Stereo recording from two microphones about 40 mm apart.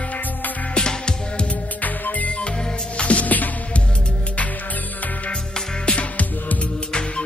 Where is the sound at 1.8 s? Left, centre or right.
Left.